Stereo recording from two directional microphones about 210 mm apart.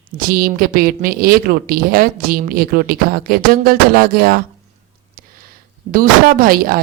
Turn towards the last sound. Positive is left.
turn(degrees=-45)  # may be behind; listen again after turning